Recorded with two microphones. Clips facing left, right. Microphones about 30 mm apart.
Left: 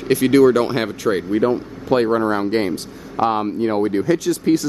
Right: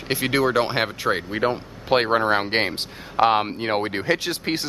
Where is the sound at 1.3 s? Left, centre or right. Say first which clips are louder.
Left 5 dB; right.